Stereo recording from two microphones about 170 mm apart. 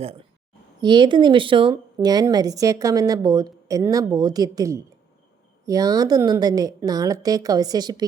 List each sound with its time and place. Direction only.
0.8 s speech: 25° right (ahead or behind)